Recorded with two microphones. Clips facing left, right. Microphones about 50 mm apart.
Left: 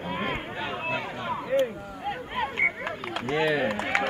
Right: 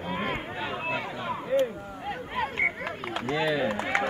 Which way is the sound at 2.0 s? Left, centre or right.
Left.